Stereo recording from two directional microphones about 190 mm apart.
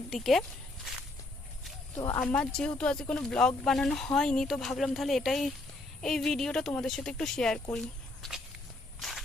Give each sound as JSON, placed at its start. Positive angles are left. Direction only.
{"t": 0.1, "sound": "speech", "side_deg": 0}
{"t": 2.0, "sound": "speech", "side_deg": 20}
{"t": 2.2, "sound": "speech", "side_deg": 5}
{"t": 9.0, "sound": "walk", "side_deg": 0}